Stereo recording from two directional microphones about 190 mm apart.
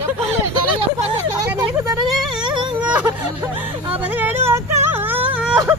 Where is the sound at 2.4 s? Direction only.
25° right (ahead or behind).